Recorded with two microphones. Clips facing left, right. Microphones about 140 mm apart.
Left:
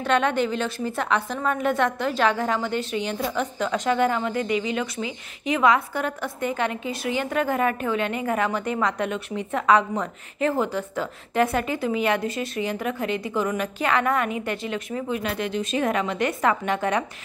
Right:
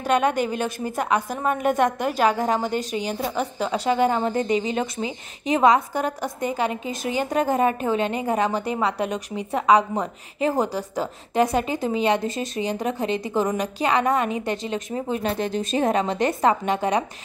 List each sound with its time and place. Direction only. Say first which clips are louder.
0.0 s a woman's voice: right 1 dB; 10° right (ahead or behind)
2.5 s a woman's voice: right 2 dB; 40° right (ahead or behind); by 6.7 s 15° right (ahead or behind)
6.9 s a woman's voice: right 1 dB; 40° right (ahead or behind)
9.5 s a woman's voice: right 2 dB; 10° right (ahead or behind)
10.5 s a woman's voice: right 1 dB; 35° right (ahead or behind)
11.5 s a woman's voice: right 1 dB; 25° right (ahead or behind)